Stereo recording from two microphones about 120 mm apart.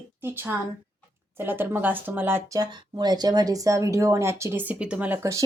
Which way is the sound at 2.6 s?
35° right (ahead or behind).